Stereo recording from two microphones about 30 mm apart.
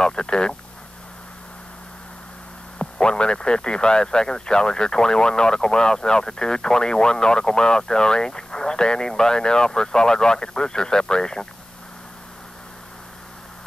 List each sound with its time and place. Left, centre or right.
0.0 s speech: left
2.8 s speech: left